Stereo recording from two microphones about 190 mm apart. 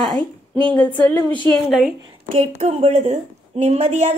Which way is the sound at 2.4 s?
35° right (ahead or behind).